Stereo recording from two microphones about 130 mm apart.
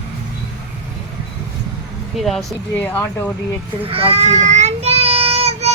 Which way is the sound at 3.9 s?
50° right (ahead or behind).